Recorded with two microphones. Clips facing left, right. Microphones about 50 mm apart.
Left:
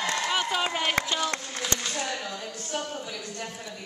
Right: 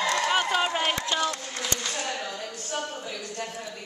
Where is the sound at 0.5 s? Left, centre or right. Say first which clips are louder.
Right 2 dB; centre.